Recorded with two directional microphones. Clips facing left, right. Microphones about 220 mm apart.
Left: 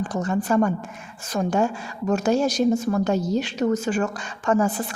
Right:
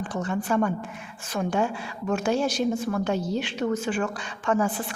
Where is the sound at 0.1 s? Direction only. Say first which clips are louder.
Left 3 dB; 40° left (ahead or behind).